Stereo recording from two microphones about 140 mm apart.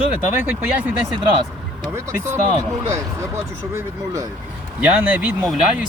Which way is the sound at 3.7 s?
20° right (ahead or behind).